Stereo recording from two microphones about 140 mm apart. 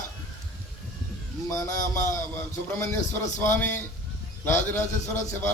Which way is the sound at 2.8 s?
15° left (ahead or behind).